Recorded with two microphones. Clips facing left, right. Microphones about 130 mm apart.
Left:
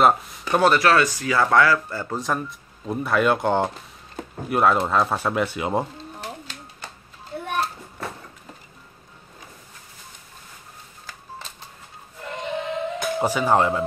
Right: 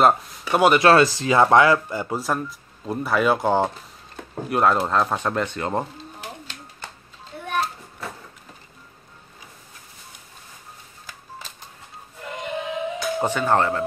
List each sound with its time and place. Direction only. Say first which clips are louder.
0.0 s speech: even; 10° right (ahead or behind)
0.8 s speech: right 4 dB; 30° right (ahead or behind); by 5.9 s 10° left (ahead or behind)
12.3 s synthetic singing: left 1 dB; 5° right (ahead or behind)
13.2 s speech: left 1 dB; 10° left (ahead or behind)